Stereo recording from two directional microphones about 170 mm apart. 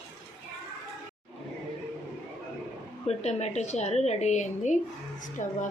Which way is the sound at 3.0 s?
40° left (ahead or behind).